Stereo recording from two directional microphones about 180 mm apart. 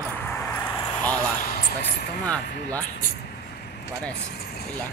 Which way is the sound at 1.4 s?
55° left (ahead or behind).